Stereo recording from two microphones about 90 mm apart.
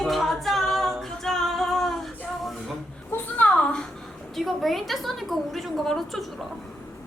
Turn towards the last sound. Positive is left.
turn(degrees=0)  # may be behind; listen again after turning